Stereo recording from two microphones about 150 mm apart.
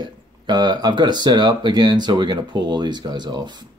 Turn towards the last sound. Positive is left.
turn(degrees=-30)  # may be behind; listen again after turning